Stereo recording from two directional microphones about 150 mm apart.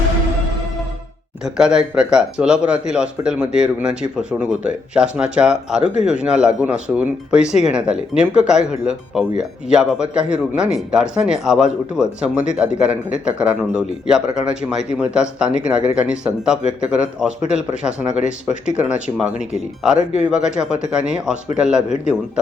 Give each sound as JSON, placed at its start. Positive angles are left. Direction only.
{"t": 1.5, "sound": "speech", "side_deg": -5}